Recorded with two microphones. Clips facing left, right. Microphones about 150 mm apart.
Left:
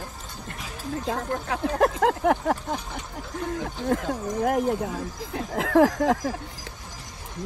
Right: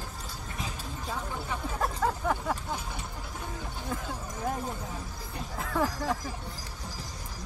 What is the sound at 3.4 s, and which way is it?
Speech, 90° left.